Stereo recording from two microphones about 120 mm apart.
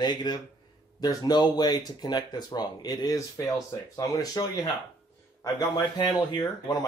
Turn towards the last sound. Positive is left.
turn(degrees=35)  # may be behind; listen again after turning